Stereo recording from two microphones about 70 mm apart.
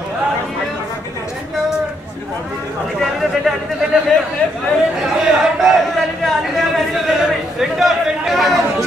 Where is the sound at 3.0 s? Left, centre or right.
Centre.